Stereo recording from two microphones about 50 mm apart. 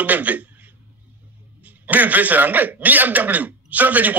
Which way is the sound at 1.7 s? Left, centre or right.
Right.